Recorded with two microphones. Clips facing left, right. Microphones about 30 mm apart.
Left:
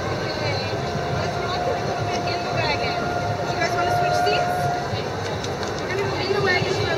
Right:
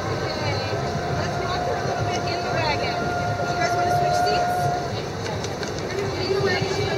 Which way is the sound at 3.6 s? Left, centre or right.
Left.